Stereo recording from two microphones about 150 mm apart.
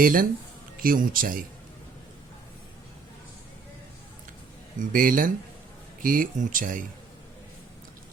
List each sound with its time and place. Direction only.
0.0 s speech: 70° right (ahead or behind)
4.8 s speech: 65° right (ahead or behind)